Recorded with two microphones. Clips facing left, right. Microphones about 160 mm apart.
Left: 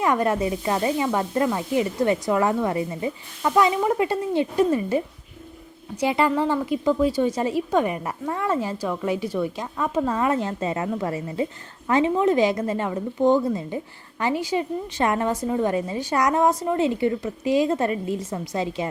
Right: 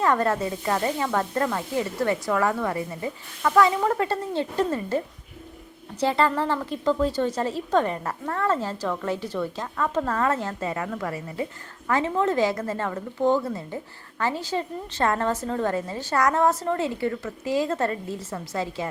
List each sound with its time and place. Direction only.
0.0 s speech: 15° left (ahead or behind)